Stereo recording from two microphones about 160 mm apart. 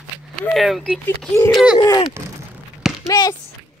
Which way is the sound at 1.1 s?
15° left (ahead or behind).